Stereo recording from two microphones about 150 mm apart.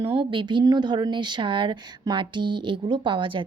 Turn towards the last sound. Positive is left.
turn(degrees=-35)  # may be behind; listen again after turning